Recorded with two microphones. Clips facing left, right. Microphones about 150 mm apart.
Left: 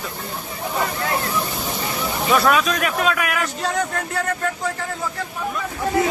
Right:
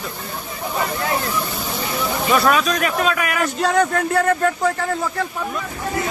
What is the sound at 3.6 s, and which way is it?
Speech, 65° right (ahead or behind).